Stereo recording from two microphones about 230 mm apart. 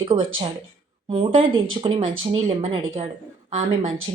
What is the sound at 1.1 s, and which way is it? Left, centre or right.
A woman's voice, right.